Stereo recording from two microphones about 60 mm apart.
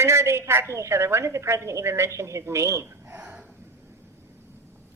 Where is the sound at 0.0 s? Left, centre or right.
Right.